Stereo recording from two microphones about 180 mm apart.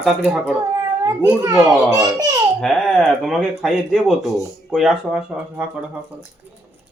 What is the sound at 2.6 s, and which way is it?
Speech, centre (ahead or behind).